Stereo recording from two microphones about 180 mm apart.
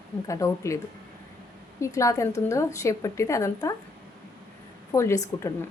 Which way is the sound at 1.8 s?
15° left (ahead or behind).